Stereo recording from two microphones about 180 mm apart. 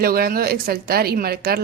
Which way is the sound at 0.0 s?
55° right (ahead or behind).